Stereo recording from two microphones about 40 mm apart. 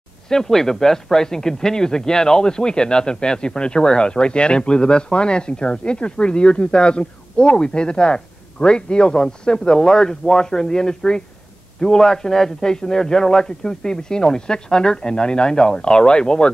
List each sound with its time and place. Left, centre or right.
0.3 s a man's voice: centre